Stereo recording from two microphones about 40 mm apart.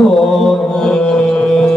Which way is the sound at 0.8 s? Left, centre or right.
Left.